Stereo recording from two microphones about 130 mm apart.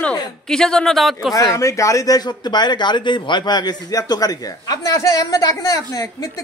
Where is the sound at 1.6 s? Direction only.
25° left (ahead or behind).